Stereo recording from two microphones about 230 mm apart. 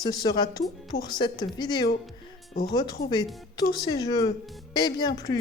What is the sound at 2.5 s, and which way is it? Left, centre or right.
Speech, left.